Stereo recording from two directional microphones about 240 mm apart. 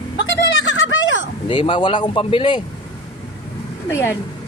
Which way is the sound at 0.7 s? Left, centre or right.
Left.